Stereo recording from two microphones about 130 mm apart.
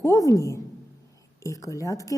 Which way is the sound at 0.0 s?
25° left (ahead or behind).